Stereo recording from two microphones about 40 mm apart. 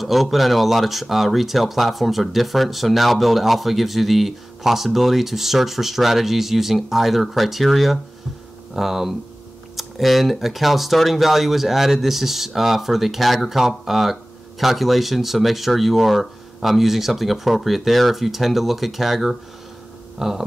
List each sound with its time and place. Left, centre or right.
0.0 s speech: centre